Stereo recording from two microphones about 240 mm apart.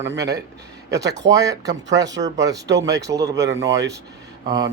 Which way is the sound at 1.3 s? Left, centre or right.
Centre.